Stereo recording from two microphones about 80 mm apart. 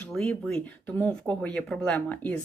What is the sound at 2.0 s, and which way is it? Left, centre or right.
Speech, left.